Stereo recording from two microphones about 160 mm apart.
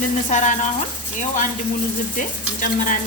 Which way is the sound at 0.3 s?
50° left (ahead or behind).